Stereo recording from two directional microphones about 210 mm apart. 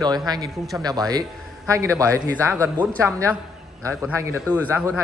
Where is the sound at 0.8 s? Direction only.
15° right (ahead or behind).